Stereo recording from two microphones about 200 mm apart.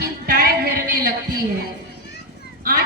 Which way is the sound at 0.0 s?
50° right (ahead or behind).